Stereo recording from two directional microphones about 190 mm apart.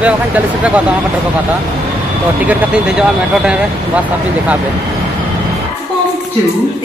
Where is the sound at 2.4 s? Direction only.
5° right (ahead or behind).